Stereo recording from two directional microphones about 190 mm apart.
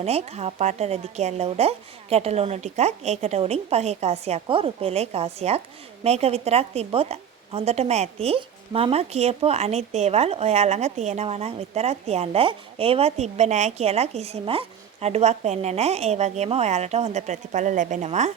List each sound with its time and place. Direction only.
0.0 s a woman's voice: 35° right (ahead or behind)